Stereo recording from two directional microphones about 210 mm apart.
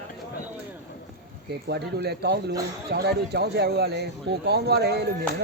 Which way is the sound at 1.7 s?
50° right (ahead or behind).